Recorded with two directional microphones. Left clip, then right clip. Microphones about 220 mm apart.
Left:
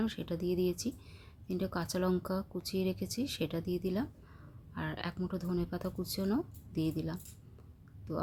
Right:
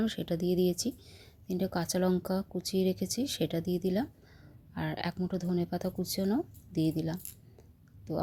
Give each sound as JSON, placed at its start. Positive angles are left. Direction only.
{"t": 0.0, "sound": "speech", "side_deg": -20}